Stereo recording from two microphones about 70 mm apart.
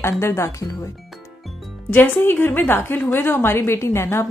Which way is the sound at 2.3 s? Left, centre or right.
Left.